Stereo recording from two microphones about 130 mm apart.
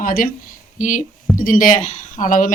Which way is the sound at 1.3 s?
90° left.